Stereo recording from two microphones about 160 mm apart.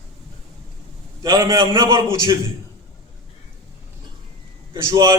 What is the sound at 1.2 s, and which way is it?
A man's voice, 20° right (ahead or behind).